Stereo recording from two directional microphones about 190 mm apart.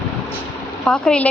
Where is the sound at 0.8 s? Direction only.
5° left (ahead or behind).